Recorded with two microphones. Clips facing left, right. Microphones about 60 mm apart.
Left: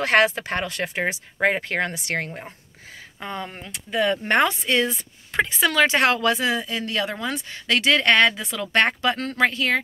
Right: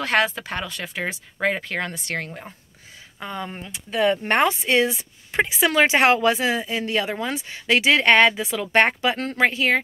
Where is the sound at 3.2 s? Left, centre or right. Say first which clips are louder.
Right 1 dB; centre.